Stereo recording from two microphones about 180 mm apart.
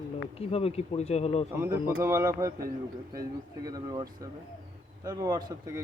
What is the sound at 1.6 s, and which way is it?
Speech, 15° right (ahead or behind).